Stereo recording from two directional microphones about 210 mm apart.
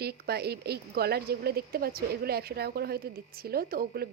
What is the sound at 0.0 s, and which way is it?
Speech, 50° right (ahead or behind).